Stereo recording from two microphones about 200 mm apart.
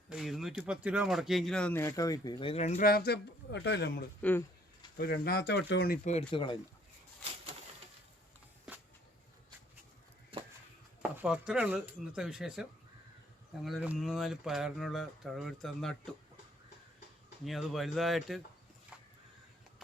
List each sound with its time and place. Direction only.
0.1 s speech: centre (ahead or behind); by 4.0 s 55° left (ahead or behind)
4.2 s speech: 10° left (ahead or behind)
4.9 s speech: 50° left (ahead or behind)
6.1 s speech: 30° left (ahead or behind)
11.2 s speech: 5° right (ahead or behind)
13.7 s speech: centre (ahead or behind)
17.4 s speech: centre (ahead or behind)
18.9 s a sound: 5° right (ahead or behind)